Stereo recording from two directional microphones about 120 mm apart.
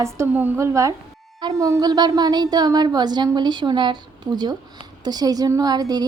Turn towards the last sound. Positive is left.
turn(degrees=-35)  # may be behind; listen again after turning